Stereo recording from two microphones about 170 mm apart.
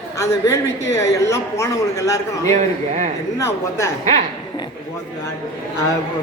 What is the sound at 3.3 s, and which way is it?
Speech, 20° left (ahead or behind).